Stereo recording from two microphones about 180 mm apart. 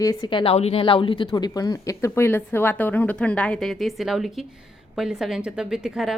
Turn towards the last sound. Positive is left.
turn(degrees=0)  # may be behind; listen again after turning